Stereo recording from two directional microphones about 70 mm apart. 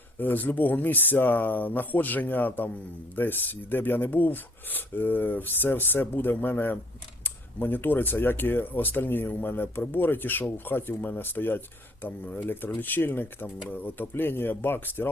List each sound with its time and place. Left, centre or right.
0.2 s speech: left